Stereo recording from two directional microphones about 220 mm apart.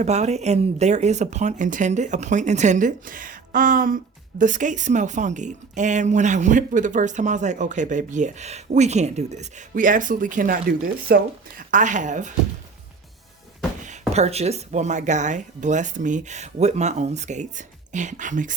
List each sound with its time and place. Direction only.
0.0 s speech: 30° right (ahead or behind)
14.1 s speech: 30° right (ahead or behind)